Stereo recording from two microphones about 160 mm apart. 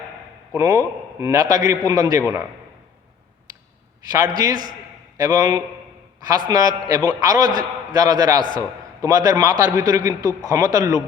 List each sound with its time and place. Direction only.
0.5 s a man's voice: 25° right (ahead or behind)
4.1 s a man's voice: 25° right (ahead or behind)